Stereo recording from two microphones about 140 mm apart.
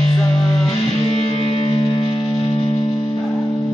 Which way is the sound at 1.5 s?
40° left (ahead or behind).